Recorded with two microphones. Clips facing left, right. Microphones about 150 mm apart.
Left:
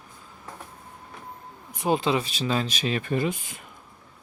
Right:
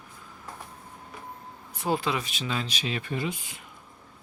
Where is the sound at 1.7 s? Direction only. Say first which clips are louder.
Left 4 dB; 20° left (ahead or behind); by 3.7 s 50° left (ahead or behind).